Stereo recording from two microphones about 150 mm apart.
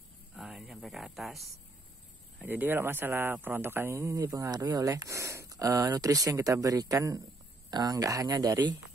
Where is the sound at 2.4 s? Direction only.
10° right (ahead or behind).